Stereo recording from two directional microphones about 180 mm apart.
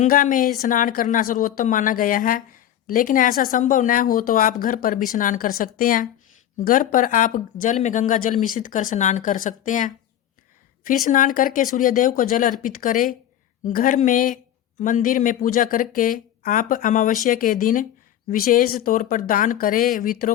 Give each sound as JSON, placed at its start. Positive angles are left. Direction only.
{"t": 0.0, "sound": "a woman's voice", "side_deg": 45}